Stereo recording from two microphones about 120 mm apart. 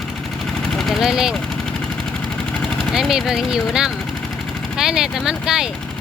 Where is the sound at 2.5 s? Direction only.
5° left (ahead or behind).